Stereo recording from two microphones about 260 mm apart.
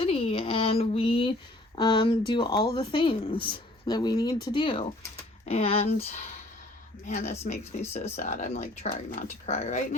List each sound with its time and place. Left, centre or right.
0.0 s speech: left